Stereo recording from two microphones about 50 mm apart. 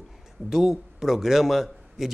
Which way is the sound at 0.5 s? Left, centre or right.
Centre.